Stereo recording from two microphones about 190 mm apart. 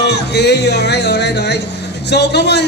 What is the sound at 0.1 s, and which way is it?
A man's voice, 60° left (ahead or behind).